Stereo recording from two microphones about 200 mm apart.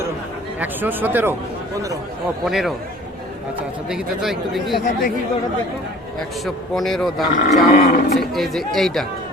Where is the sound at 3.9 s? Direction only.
Centre (ahead or behind).